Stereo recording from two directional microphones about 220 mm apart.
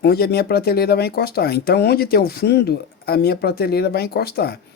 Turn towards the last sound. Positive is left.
turn(degrees=45)  # may be behind; listen again after turning